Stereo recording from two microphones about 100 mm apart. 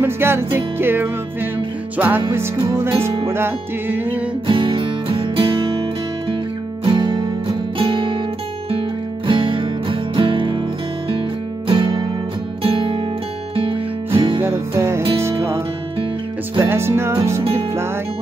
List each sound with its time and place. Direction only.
0.0 s music: 25° right (ahead or behind)
4.5 s music: 55° right (ahead or behind)
6.8 s music: 50° right (ahead or behind)
7.8 s music: 60° right (ahead or behind)
9.3 s music: 55° right (ahead or behind)
11.6 s music: 55° right (ahead or behind)
14.4 s music: 25° right (ahead or behind)
16.6 s music: 25° right (ahead or behind)
17.4 s music: 80° right